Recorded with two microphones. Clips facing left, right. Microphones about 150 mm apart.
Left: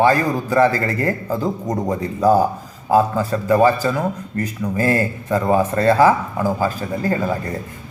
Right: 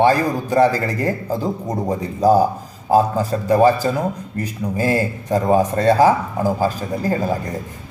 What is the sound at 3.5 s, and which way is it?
A man's voice, 15° right (ahead or behind).